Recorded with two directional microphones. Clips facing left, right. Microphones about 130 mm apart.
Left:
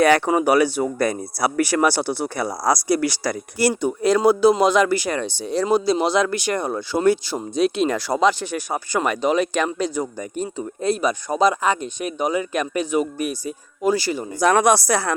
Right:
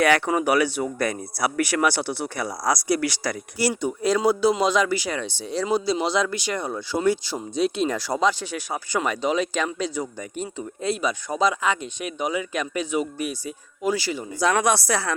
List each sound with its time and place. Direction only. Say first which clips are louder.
0.0 s speech: left 4 dB; 30° left (ahead or behind)
3.6 s speech: left 4 dB; 55° left (ahead or behind)
8.5 s speech: left 3 dB; 45° left (ahead or behind)